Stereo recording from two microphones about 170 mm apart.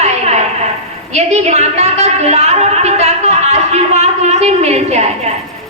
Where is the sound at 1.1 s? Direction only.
40° right (ahead or behind).